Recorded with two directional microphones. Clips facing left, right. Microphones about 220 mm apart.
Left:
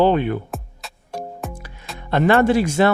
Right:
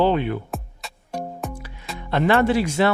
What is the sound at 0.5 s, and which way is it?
Music, centre (ahead or behind).